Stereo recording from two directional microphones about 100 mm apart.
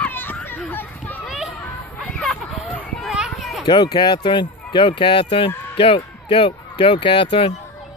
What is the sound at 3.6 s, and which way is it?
Speech, 45° left (ahead or behind).